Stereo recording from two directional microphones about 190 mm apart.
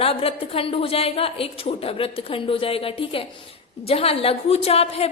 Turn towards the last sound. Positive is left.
turn(degrees=30)  # may be behind; listen again after turning